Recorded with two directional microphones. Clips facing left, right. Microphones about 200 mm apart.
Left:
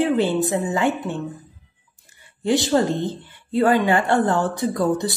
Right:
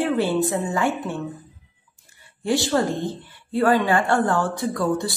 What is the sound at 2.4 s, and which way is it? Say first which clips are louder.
A woman's voice: left 2 dB; 20° left (ahead or behind).